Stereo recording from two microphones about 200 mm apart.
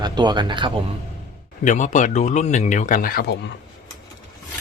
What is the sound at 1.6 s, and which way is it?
Speech, 40° left (ahead or behind).